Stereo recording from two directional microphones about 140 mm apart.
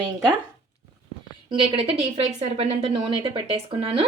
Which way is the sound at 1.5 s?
40° right (ahead or behind).